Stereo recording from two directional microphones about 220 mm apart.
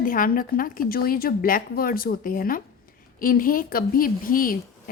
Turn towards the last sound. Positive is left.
turn(degrees=40)  # may be behind; listen again after turning